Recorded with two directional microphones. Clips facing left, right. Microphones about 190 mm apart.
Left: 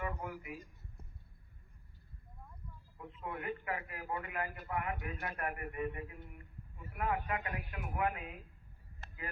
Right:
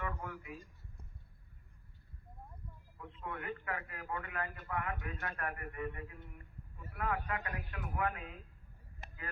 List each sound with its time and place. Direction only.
0.0 s a man's voice: 20° left (ahead or behind)
3.2 s a man's voice: 25° left (ahead or behind)
9.0 s vehicle: 15° right (ahead or behind)